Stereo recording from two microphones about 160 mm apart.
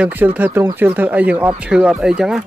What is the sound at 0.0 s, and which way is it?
Speech, 10° right (ahead or behind).